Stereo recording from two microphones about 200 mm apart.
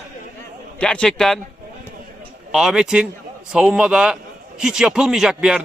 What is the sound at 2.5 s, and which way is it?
A man's voice, centre (ahead or behind).